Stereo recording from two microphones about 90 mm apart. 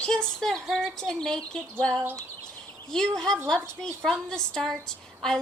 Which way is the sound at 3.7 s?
5° left (ahead or behind).